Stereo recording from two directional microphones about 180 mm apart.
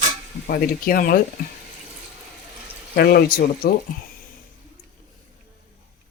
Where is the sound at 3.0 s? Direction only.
60° left (ahead or behind).